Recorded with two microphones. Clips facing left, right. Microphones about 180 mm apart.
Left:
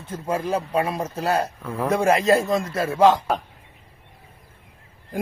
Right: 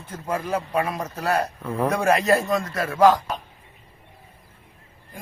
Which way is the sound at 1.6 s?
Centre (ahead or behind).